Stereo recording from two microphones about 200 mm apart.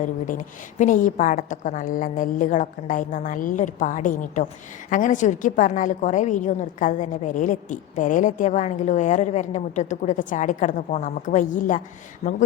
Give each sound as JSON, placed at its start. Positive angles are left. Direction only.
{"t": 0.0, "sound": "a woman's voice", "side_deg": 40}